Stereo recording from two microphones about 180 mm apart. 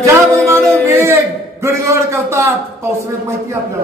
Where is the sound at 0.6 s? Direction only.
15° right (ahead or behind).